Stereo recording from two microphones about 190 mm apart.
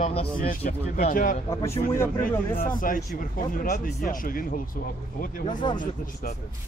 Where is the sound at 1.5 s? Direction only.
15° left (ahead or behind).